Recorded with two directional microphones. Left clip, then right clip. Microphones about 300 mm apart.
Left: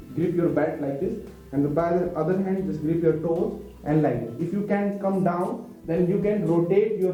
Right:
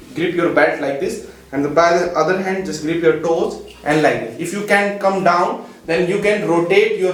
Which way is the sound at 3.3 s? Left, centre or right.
Right.